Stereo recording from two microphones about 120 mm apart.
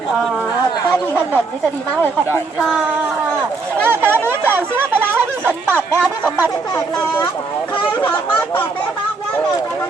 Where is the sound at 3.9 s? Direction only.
20° right (ahead or behind).